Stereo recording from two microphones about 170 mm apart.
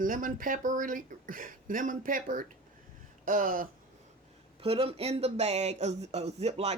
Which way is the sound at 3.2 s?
55° right (ahead or behind).